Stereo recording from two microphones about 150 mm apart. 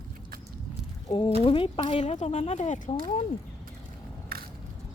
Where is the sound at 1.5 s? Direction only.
35° left (ahead or behind); by 2.9 s 55° left (ahead or behind).